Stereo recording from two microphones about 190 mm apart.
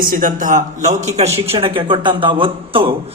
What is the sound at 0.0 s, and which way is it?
A man's voice, 45° right (ahead or behind).